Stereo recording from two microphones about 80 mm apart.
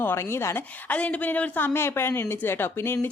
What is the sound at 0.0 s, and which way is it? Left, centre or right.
A woman's voice, left.